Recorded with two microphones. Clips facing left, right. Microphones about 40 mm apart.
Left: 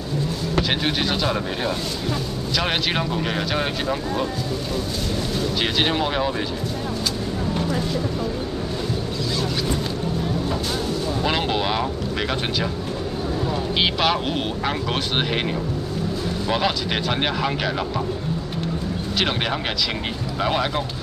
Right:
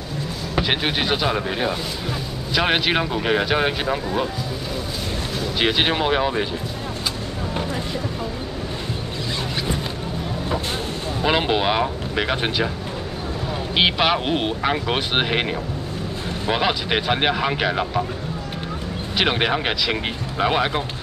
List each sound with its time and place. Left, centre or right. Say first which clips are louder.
0.6 s speech: right 1 dB; centre
5.6 s speech: right 3 dB; centre
11.2 s speech: right 5 dB; centre
13.7 s speech: right 3 dB; centre
19.1 s speech: right 4 dB; centre